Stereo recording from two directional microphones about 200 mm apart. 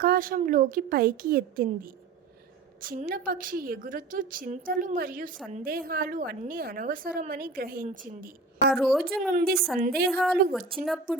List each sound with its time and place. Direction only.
0.0 s a woman's voice: 45° right (ahead or behind)
8.7 s a woman's voice: centre (ahead or behind)
9.3 s a woman's voice: 50° right (ahead or behind)
10.1 s a woman's voice: centre (ahead or behind)